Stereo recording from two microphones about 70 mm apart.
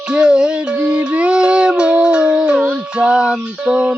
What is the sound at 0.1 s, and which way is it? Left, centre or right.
Music, centre.